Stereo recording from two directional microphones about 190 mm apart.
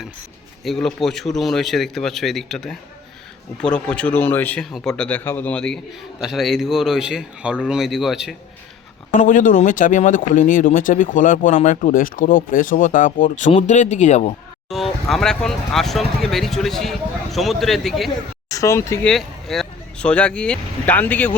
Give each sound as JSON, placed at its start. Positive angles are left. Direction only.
{"t": 0.6, "sound": "speech", "side_deg": 0}
{"t": 9.1, "sound": "speech", "side_deg": 45}
{"t": 14.7, "sound": "speech", "side_deg": 0}
{"t": 18.4, "sound": "speech", "side_deg": 15}
{"t": 19.0, "sound": "speech", "side_deg": 0}